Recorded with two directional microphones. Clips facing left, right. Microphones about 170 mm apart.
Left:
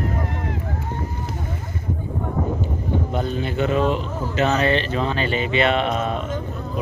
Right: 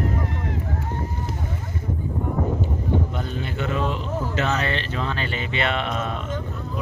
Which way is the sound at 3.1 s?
20° left (ahead or behind).